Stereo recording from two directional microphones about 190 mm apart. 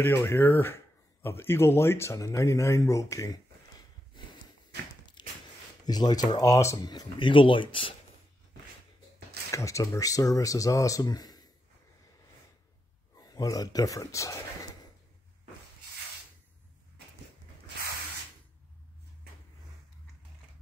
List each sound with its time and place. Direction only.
0.0 s speech: 10° left (ahead or behind)
5.2 s a sound: 25° left (ahead or behind)
5.9 s speech: 20° left (ahead or behind)
9.5 s speech: 15° left (ahead or behind)
13.1 s speech: 20° left (ahead or behind)